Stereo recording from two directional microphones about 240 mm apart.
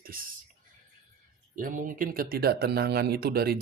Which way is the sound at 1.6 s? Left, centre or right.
Right.